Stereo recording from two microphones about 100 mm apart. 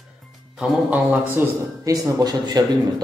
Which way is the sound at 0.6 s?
15° right (ahead or behind).